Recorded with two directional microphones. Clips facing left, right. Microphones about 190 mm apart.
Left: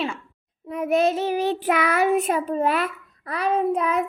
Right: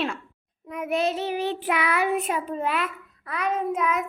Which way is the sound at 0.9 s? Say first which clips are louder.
Left 4 dB; 45° left (ahead or behind).